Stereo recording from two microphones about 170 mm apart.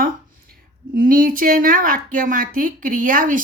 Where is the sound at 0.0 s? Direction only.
55° right (ahead or behind).